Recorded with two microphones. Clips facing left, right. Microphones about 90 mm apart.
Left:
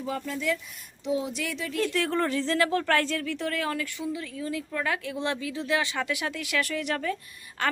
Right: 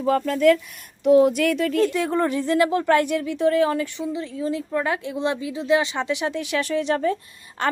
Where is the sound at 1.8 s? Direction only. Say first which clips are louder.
Right 2 dB; 20° right (ahead or behind).